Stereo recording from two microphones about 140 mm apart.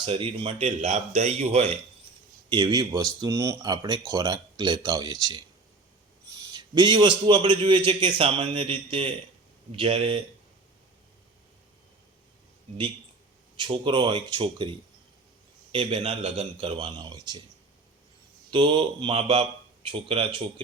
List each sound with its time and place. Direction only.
0.0 s speech: 40° right (ahead or behind)
2.5 s speech: 35° right (ahead or behind)
6.4 s a sound: 30° right (ahead or behind)
7.3 s speech: 35° right (ahead or behind)
13.6 s speech: 35° right (ahead or behind)
18.5 s speech: 35° right (ahead or behind)